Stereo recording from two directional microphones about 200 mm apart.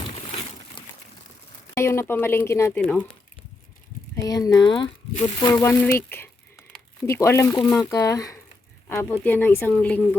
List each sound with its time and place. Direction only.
1.7 s speech: 15° left (ahead or behind)
4.1 s speech: 20° left (ahead or behind)